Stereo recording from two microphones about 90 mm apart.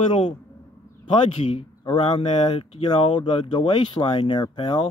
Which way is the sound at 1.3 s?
80° left.